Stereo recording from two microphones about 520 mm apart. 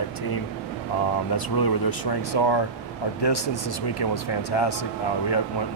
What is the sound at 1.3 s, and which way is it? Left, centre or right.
Speech, left.